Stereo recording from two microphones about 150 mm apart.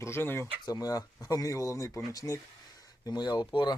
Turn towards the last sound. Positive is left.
turn(degrees=30)  # may be behind; listen again after turning